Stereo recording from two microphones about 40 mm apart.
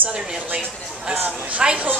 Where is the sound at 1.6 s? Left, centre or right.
Right.